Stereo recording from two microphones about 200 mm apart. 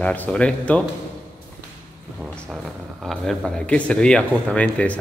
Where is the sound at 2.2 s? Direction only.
Centre (ahead or behind).